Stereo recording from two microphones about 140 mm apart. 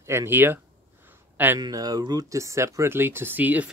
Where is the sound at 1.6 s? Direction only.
25° right (ahead or behind).